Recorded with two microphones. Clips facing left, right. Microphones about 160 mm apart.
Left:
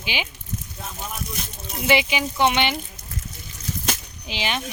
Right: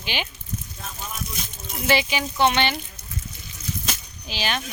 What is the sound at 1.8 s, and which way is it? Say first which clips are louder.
Speech: left 2 dB; 15° left (ahead or behind).